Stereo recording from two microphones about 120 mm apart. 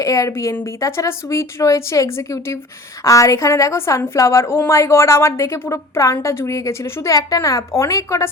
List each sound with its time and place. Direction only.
0.0 s a woman's voice: 25° left (ahead or behind)